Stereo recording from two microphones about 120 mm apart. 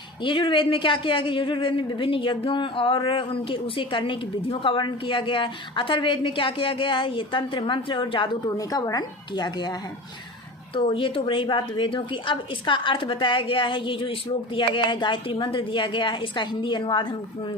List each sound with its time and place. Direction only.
0.2 s a woman's voice: 45° left (ahead or behind)
8.4 s a woman's voice: 30° left (ahead or behind)
10.8 s a woman's voice: 45° left (ahead or behind)